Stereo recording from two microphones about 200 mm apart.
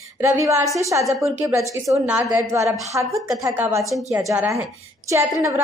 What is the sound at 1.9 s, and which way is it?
Speech, centre (ahead or behind).